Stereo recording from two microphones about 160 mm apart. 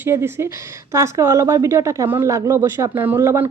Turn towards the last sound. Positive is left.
turn(degrees=-15)  # may be behind; listen again after turning